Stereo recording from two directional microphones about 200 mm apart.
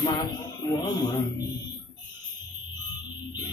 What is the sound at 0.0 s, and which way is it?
Speech, 20° left (ahead or behind).